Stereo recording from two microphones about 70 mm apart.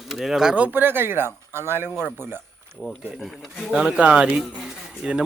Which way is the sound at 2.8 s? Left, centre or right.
Centre.